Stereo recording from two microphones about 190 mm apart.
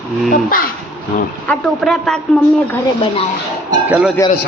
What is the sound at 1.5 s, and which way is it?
Speech, 5° left (ahead or behind).